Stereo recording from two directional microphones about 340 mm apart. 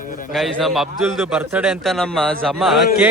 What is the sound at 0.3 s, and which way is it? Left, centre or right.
A man's voice, centre.